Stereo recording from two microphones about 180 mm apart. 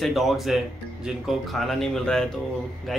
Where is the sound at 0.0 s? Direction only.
Centre (ahead or behind).